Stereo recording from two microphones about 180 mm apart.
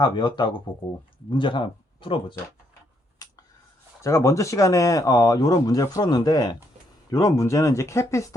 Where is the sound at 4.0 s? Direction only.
15° left (ahead or behind).